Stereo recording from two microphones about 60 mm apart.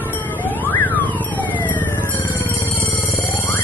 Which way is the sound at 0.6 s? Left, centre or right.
Left.